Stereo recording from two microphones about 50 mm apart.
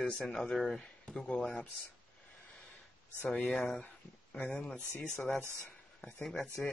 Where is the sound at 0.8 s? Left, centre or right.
Centre.